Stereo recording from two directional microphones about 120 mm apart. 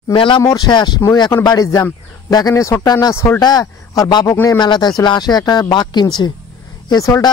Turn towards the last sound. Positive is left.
turn(degrees=30)  # may be behind; listen again after turning